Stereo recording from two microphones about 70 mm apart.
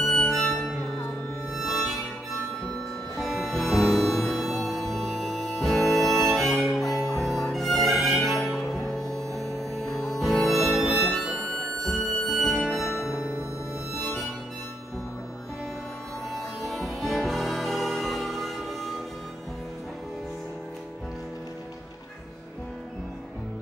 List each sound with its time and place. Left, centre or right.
0.0 s music: centre
3.2 s music: centre
9.3 s music: right
9.6 s music: centre
13.2 s music: right
16.3 s music: centre